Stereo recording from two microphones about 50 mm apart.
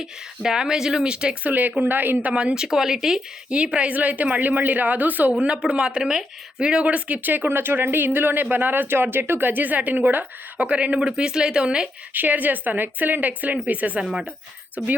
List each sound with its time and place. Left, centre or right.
0.0 s speech: centre
1.5 s speech: right
2.3 s speech: centre
2.6 s speech: centre
3.5 s speech: right
5.4 s speech: centre
12.1 s speech: right
14.0 s speech: centre
14.8 s speech: right